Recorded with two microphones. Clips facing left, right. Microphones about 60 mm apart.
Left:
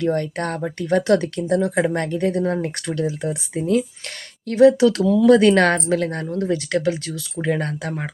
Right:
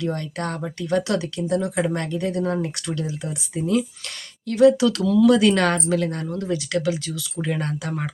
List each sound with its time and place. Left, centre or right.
0.0 s speech: left